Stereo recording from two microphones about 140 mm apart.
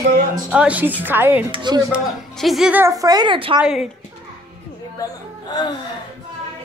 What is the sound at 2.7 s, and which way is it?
Speech, 20° right (ahead or behind).